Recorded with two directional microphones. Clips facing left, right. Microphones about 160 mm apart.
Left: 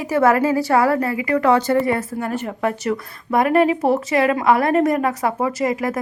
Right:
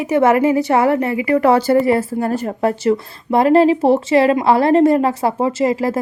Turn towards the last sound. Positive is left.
turn(degrees=-30)  # may be behind; listen again after turning